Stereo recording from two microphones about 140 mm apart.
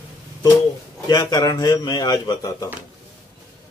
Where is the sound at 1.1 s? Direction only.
30° left (ahead or behind).